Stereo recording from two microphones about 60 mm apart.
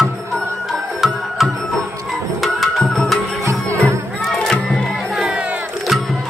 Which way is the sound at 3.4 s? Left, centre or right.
Right.